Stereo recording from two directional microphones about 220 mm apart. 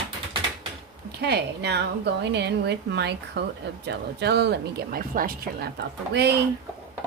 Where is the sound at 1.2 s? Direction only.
50° right (ahead or behind).